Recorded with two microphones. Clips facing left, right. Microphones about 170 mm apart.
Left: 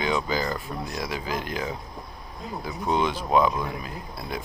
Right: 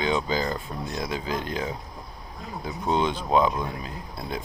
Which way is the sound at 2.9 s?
25° right (ahead or behind).